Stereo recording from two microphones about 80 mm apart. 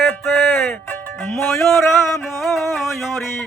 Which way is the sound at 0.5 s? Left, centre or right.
Left.